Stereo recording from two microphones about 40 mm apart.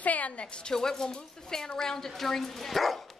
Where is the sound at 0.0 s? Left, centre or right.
Left.